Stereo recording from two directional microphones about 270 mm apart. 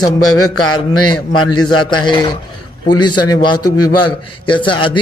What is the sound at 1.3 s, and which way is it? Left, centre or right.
Speech, left.